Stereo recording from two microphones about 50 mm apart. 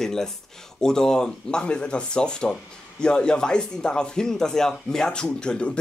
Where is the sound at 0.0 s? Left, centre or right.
Centre.